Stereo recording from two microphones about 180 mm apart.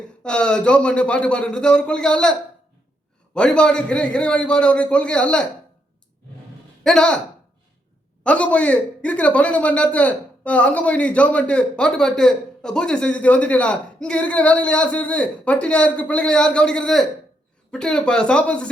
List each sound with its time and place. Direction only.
0.2 s speech: 5° left (ahead or behind)
3.3 s speech: 5° left (ahead or behind)
6.8 s speech: 5° left (ahead or behind)
8.2 s a man's voice: 5° left (ahead or behind)